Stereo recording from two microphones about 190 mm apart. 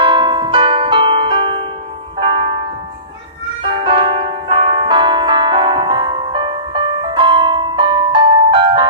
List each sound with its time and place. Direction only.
0.0 s music: 25° right (ahead or behind)